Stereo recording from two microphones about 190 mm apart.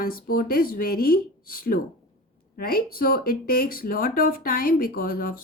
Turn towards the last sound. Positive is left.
turn(degrees=50)  # may be behind; listen again after turning